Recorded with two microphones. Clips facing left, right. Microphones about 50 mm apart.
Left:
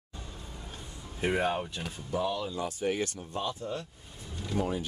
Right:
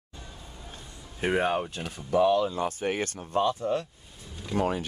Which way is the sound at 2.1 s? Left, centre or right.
Right.